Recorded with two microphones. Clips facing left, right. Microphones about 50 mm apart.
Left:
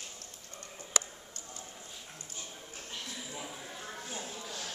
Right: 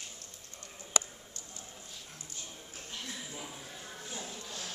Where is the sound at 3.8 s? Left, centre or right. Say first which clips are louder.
Left 2 dB; left.